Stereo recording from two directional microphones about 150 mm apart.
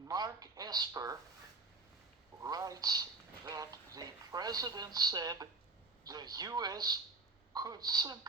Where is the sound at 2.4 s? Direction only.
25° right (ahead or behind).